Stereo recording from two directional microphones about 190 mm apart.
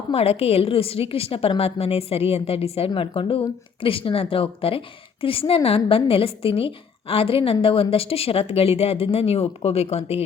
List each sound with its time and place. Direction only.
0.1 s a woman's voice: 30° left (ahead or behind)